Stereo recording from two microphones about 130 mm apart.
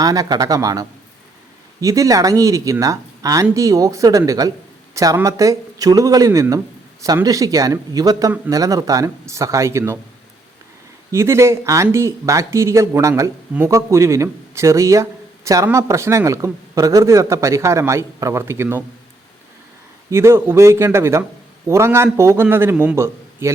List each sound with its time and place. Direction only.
0.0 s a man's voice: 30° right (ahead or behind)
11.1 s a man's voice: 20° right (ahead or behind)
20.1 s a man's voice: 20° right (ahead or behind)